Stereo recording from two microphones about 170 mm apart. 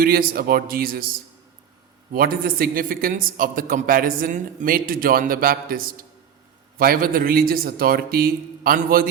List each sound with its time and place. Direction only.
0.0 s a man's voice: 60° right (ahead or behind)
2.1 s a man's voice: 60° right (ahead or behind)